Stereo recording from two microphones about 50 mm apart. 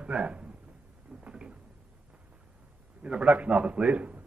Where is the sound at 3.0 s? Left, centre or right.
Right.